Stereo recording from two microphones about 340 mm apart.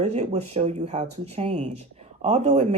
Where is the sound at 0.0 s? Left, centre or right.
Centre.